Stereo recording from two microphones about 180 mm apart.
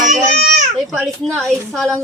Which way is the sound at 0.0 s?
45° right (ahead or behind).